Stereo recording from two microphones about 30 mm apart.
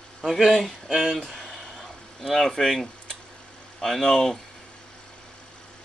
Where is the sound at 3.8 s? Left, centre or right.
Centre.